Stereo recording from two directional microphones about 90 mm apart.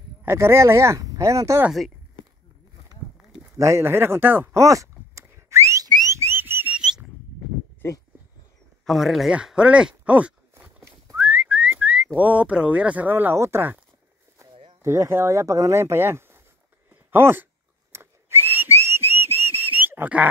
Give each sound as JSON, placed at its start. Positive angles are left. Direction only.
{"t": 0.2, "sound": "speech", "side_deg": -30}
{"t": 3.5, "sound": "a sound", "side_deg": -35}
{"t": 6.0, "sound": "whistling", "side_deg": -30}
{"t": 6.8, "sound": "a sound", "side_deg": -5}
{"t": 8.8, "sound": "speech", "side_deg": 0}
{"t": 11.1, "sound": "whistling", "side_deg": -20}
{"t": 12.2, "sound": "speech", "side_deg": -15}
{"t": 16.9, "sound": "a sound", "side_deg": -25}
{"t": 17.9, "sound": "whistle", "side_deg": -25}